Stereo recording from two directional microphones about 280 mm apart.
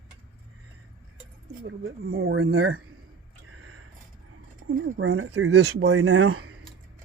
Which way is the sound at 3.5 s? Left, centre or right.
Right.